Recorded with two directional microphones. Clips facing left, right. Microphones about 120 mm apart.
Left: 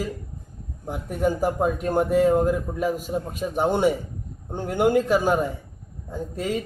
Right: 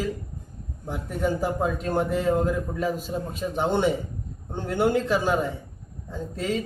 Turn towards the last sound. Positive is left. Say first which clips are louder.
# left 1 dB
turn(degrees=10)  # may be behind; listen again after turning